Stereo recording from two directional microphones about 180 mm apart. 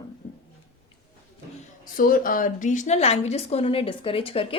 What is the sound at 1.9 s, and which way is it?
A woman's voice, 55° left (ahead or behind).